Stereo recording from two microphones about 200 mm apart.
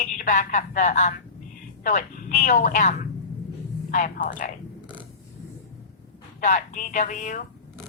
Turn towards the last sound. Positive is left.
turn(degrees=40)  # may be behind; listen again after turning